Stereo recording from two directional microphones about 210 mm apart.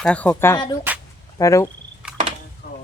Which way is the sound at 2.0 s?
5° right (ahead or behind).